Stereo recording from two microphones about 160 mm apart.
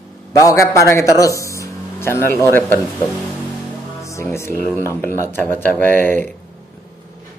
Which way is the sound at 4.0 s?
20° left (ahead or behind).